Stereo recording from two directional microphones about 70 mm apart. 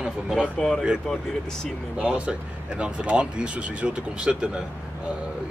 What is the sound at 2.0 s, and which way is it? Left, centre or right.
Speech, centre.